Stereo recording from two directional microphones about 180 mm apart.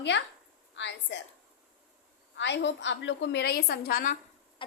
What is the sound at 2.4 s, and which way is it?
A woman's voice, 80° left.